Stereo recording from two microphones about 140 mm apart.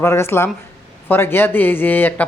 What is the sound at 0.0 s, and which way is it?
A man's voice, 20° left (ahead or behind).